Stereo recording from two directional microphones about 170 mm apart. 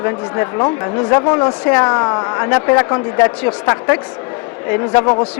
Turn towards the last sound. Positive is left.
turn(degrees=10)  # may be behind; listen again after turning